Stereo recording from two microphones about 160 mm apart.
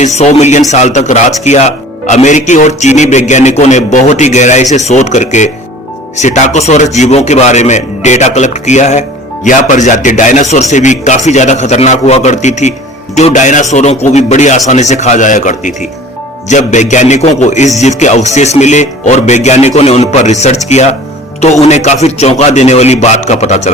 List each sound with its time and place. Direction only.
0.0 s speech: 45° left (ahead or behind)